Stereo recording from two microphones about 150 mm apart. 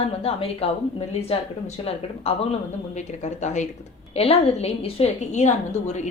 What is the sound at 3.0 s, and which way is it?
Speech, 50° left (ahead or behind).